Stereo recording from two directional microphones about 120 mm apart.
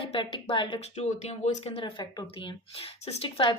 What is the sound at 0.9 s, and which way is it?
Speech, 70° left (ahead or behind).